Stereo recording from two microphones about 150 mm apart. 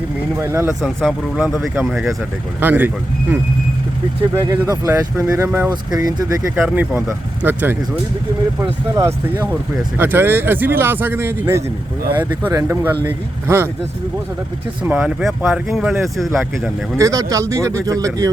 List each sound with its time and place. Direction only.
0.3 s speech: 15° right (ahead or behind)
0.7 s speech: centre (ahead or behind)
2.6 s speech: 10° right (ahead or behind)
4.4 s speech: 20° right (ahead or behind)
5.9 s speech: 25° right (ahead or behind)
7.4 s speech: 10° right (ahead or behind)
9.0 s speech: 20° right (ahead or behind)
14.8 s speech: 10° right (ahead or behind)
15.2 s speech: centre (ahead or behind)
17.0 s speech: 25° right (ahead or behind)